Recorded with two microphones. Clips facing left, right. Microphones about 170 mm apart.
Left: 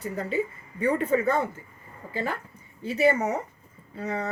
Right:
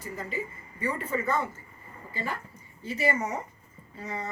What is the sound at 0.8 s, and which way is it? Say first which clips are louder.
Speech: left 7 dB; 60° left (ahead or behind).